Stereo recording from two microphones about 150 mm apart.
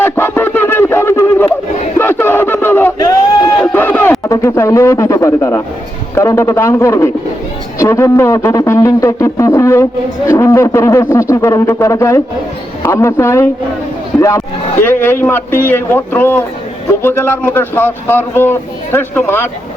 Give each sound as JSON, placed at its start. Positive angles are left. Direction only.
{"t": 0.0, "sound": "music", "side_deg": 15}
{"t": 2.0, "sound": "a sound", "side_deg": 15}
{"t": 4.3, "sound": "a man's voice", "side_deg": 20}